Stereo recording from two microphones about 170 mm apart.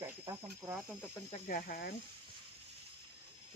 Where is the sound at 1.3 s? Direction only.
55° left (ahead or behind).